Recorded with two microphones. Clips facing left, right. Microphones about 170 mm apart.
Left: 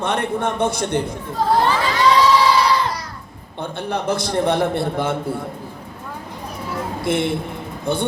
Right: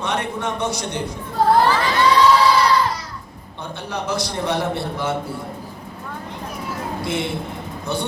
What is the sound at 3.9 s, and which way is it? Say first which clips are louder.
Speech: left 3 dB; 55° left (ahead or behind).